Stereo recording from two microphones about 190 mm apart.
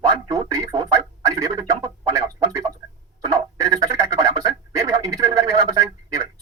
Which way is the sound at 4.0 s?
20° right (ahead or behind).